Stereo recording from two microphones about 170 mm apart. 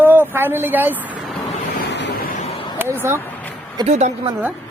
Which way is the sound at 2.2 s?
45° left (ahead or behind).